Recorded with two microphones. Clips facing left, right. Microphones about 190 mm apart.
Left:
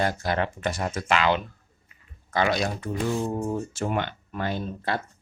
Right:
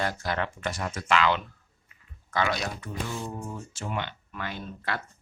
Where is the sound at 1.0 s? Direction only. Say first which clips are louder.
Left 1 dB; 15° left (ahead or behind).